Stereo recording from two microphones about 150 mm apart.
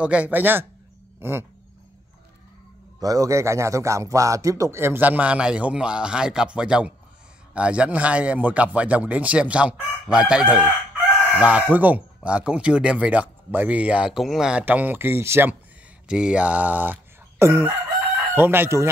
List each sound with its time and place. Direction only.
0.0 s speech: 10° right (ahead or behind)
3.0 s speech: 25° right (ahead or behind)